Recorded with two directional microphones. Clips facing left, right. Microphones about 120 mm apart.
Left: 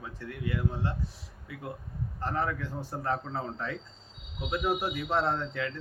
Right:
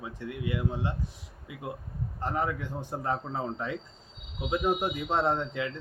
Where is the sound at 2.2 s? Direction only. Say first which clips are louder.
Right 1 dB; 15° right (ahead or behind).